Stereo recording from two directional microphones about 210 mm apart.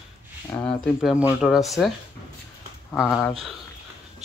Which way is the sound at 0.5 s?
20° left (ahead or behind).